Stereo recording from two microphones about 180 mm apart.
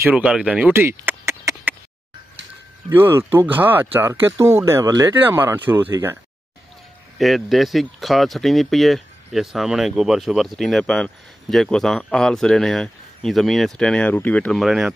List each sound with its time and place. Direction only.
0.0 s speech: 5° right (ahead or behind)
2.9 s speech: 10° right (ahead or behind)
7.2 s speech: centre (ahead or behind)